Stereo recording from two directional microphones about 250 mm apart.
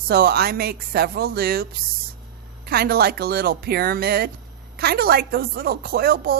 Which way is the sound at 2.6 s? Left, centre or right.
Right.